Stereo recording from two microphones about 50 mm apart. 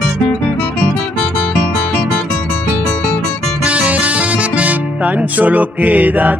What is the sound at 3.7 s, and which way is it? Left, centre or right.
Music, right.